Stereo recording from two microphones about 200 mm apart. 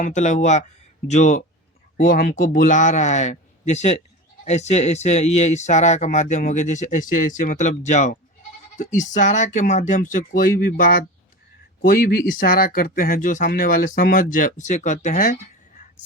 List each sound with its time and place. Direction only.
0.0 s speech: 35° left (ahead or behind)